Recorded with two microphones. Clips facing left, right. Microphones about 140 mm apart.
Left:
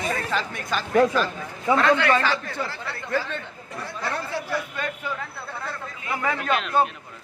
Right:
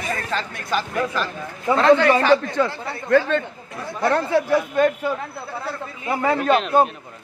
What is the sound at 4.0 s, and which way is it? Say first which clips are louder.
Speech: right 11 dB; 70° right (ahead or behind).